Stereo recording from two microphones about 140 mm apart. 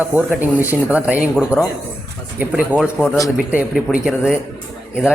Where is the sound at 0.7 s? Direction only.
10° right (ahead or behind).